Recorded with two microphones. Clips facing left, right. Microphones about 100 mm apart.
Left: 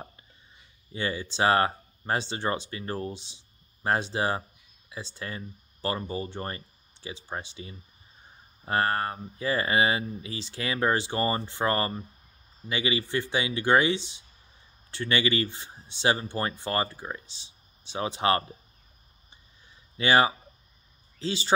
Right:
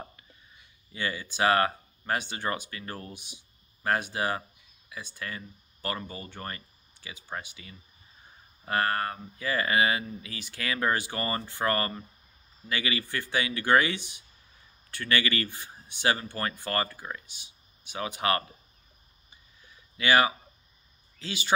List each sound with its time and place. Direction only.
0.9 s speech: 30° left (ahead or behind)
19.7 s a sound: 30° left (ahead or behind)
21.2 s speech: 30° left (ahead or behind)